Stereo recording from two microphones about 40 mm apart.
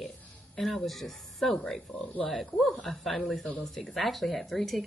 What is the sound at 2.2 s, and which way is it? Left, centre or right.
Speech, centre.